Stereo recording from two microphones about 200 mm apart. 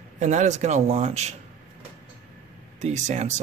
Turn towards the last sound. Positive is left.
turn(degrees=-35)  # may be behind; listen again after turning